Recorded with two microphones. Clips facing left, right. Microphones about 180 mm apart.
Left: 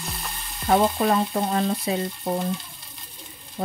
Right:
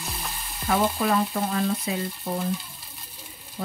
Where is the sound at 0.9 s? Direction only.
35° left (ahead or behind).